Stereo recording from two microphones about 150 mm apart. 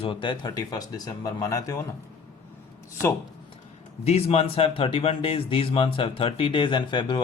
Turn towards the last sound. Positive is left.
turn(degrees=30)  # may be behind; listen again after turning